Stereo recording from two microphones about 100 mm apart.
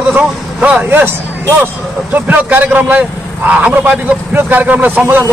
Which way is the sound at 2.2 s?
20° right (ahead or behind).